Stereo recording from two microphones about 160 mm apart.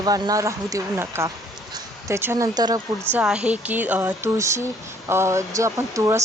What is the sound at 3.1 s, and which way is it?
Speech, 5° right (ahead or behind).